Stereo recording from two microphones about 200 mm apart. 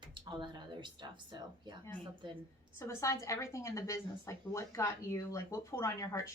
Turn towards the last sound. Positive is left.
turn(degrees=15)  # may be behind; listen again after turning